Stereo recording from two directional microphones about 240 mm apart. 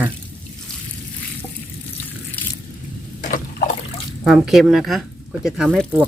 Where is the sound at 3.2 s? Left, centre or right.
Left.